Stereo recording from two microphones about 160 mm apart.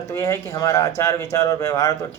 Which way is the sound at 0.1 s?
20° left (ahead or behind).